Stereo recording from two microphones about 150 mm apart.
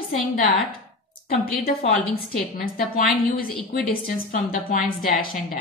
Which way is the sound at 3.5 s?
Centre (ahead or behind).